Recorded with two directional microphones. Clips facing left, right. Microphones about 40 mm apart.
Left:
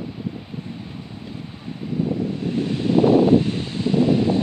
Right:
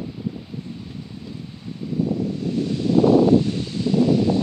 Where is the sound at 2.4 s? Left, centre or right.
Left.